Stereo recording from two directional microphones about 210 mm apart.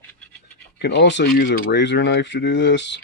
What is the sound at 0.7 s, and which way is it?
Speech, 55° left (ahead or behind).